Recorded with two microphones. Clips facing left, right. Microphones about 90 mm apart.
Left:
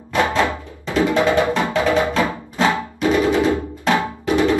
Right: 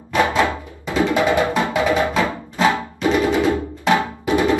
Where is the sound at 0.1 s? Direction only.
15° right (ahead or behind).